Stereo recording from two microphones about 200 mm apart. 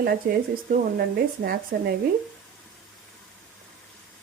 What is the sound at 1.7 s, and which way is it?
Speech, 55° right (ahead or behind).